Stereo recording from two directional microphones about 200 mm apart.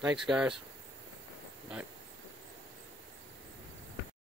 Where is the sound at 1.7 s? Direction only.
5° right (ahead or behind).